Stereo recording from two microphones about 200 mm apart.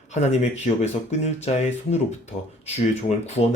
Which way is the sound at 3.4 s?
35° left (ahead or behind).